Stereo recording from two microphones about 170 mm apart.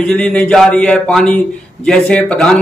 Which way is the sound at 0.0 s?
5° left (ahead or behind).